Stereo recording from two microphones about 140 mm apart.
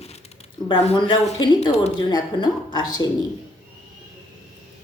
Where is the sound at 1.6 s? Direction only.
50° left (ahead or behind).